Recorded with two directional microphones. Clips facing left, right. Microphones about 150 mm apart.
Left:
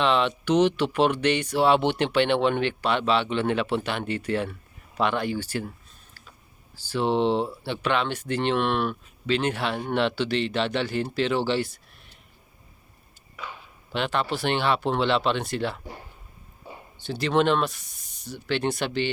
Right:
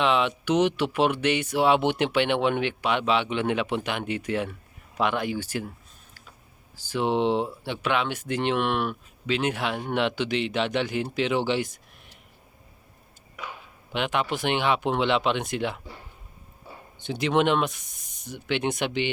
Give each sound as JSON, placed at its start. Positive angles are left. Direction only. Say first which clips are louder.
{"t": 0.0, "sound": "speech", "louder": "left 1 dB", "side_deg": -10}
{"t": 6.8, "sound": "speech", "louder": "left 1 dB", "side_deg": -15}
{"t": 13.3, "sound": "speech", "louder": "even", "side_deg": -10}
{"t": 17.1, "sound": "speech", "louder": "even", "side_deg": -15}